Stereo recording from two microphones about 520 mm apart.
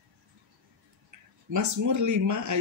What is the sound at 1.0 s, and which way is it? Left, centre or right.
Speech, right.